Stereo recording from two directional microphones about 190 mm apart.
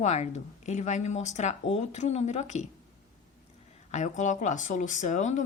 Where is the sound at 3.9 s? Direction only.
40° left (ahead or behind).